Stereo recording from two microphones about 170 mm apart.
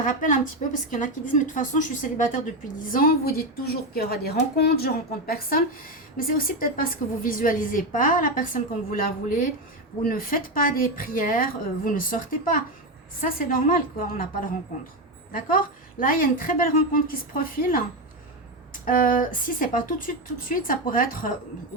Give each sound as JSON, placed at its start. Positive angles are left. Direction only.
{"t": 0.0, "sound": "a woman's voice", "side_deg": 50}
{"t": 2.9, "sound": "a woman's voice", "side_deg": 60}